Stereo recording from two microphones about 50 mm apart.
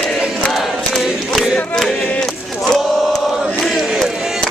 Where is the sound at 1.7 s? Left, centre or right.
Centre.